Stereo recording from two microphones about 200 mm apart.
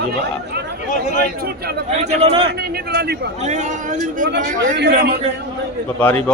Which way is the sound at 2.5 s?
50° right (ahead or behind).